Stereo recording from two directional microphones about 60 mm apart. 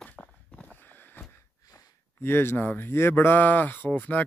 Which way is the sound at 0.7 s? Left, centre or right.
Left.